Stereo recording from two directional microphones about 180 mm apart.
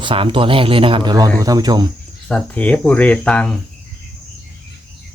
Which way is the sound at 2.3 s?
5° left (ahead or behind).